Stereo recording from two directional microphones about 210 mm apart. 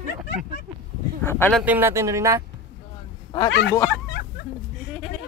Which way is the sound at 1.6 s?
10° right (ahead or behind).